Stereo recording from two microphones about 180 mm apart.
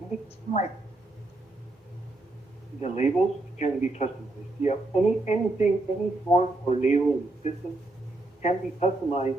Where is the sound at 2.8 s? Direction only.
40° left (ahead or behind).